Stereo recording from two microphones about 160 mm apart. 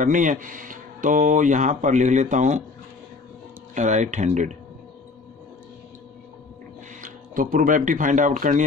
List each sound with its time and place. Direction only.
0.0 s speech: 55° right (ahead or behind)
3.7 s speech: 50° right (ahead or behind)
7.0 s speech: 55° right (ahead or behind)